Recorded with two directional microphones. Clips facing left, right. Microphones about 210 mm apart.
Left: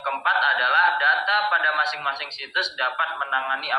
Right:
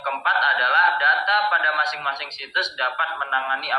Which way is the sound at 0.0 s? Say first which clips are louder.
Right 1 dB; 50° right (ahead or behind).